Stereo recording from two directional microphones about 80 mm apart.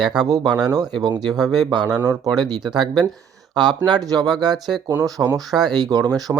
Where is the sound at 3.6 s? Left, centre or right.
Right.